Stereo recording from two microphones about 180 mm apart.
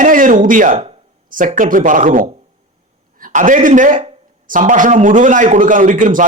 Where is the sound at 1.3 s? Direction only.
50° right (ahead or behind).